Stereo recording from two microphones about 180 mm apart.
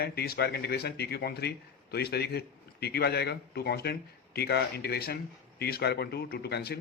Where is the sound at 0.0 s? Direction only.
60° left (ahead or behind).